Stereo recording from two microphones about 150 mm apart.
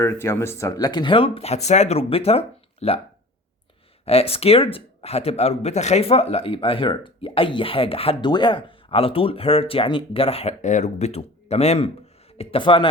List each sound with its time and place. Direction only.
0.0 s speech: 20° left (ahead or behind); by 3.0 s 45° left (ahead or behind)
4.0 s speech: 40° left (ahead or behind)